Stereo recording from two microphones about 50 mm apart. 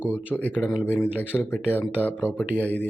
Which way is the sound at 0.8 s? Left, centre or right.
Left.